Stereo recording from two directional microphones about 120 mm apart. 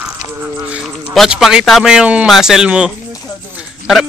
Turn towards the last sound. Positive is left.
turn(degrees=0)  # may be behind; listen again after turning